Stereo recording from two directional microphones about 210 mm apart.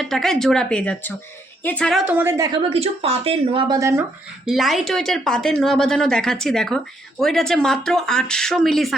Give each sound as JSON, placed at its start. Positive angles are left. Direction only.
{"t": 0.0, "sound": "speech", "side_deg": 0}
{"t": 2.6, "sound": "speech", "side_deg": -30}
{"t": 4.4, "sound": "speech", "side_deg": 0}